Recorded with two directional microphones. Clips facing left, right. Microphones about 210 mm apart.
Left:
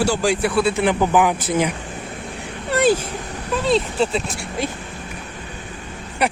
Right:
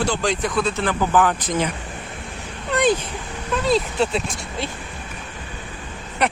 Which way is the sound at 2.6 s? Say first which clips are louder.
Left 2 dB; 5° left (ahead or behind).